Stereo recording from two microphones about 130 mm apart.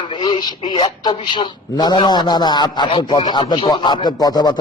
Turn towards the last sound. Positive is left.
turn(degrees=30)  # may be behind; listen again after turning